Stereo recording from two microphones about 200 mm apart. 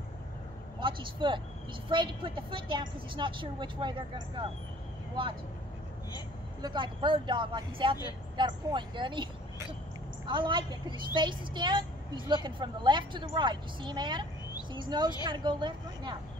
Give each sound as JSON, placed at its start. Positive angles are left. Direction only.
{"t": 0.7, "sound": "a woman's voice", "side_deg": -25}
{"t": 6.6, "sound": "a woman's voice", "side_deg": -25}